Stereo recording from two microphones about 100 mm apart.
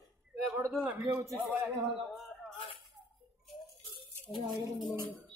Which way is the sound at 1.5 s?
20° right (ahead or behind).